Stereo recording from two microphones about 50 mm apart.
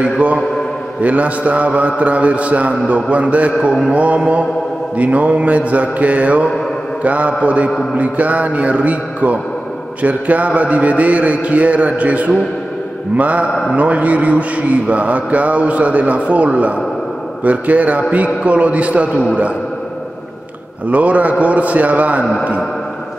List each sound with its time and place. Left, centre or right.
0.0 s a man's voice: right
20.9 s a man's voice: right